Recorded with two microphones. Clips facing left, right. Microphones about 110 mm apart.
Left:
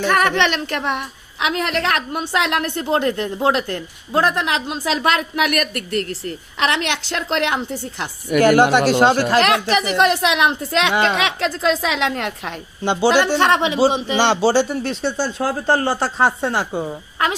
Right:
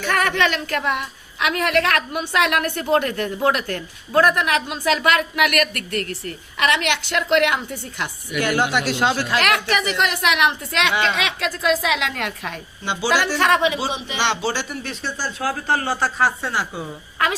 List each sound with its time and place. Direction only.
0.0 s a woman's voice: 20° left (ahead or behind)
8.3 s speech: 40° left (ahead or behind)
9.4 s a woman's voice: 30° left (ahead or behind)